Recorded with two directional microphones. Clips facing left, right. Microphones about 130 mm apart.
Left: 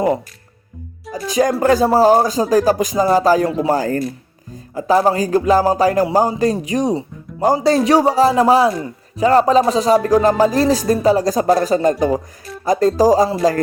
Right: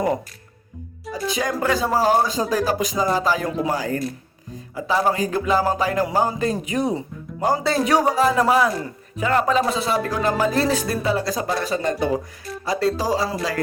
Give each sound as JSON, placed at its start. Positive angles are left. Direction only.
{"t": 1.3, "sound": "music", "side_deg": 40}